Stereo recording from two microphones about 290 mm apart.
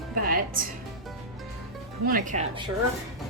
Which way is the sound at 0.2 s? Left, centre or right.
Right.